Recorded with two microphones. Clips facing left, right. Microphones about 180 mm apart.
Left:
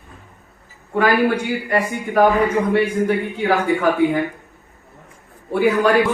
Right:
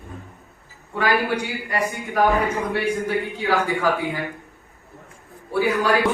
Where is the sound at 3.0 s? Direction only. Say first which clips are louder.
Left 5 dB; 60° left (ahead or behind).